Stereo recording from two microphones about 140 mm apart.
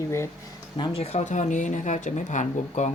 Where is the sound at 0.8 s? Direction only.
45° left (ahead or behind).